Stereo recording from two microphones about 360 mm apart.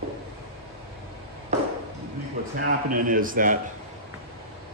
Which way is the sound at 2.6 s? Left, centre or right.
Right.